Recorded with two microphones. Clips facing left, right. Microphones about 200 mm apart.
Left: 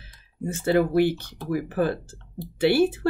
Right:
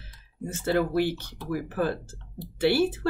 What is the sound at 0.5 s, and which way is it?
Speech, 15° left (ahead or behind).